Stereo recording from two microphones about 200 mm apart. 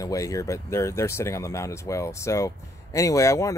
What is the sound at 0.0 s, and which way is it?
Speech, 15° left (ahead or behind).